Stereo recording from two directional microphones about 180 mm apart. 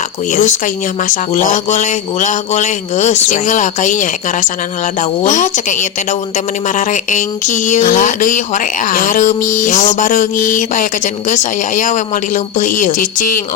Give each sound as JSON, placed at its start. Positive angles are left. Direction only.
{"t": 0.3, "sound": "speech", "side_deg": 45}